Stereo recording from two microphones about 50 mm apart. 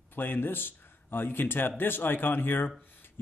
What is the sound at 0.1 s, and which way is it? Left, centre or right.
Speech, left.